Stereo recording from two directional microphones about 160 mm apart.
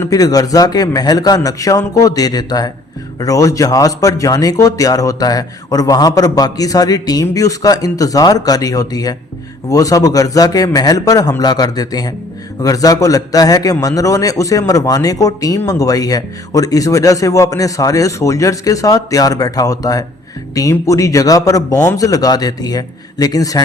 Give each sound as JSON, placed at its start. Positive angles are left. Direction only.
{"t": 0.0, "sound": "a man's voice", "side_deg": 20}